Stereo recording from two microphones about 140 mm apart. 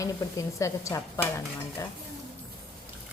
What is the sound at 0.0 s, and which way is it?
A woman's voice, 20° left (ahead or behind).